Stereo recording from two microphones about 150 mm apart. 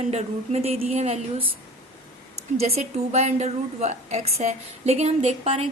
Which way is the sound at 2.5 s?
45° right (ahead or behind).